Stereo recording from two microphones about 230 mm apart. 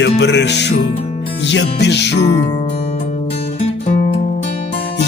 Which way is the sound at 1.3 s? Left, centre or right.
Left.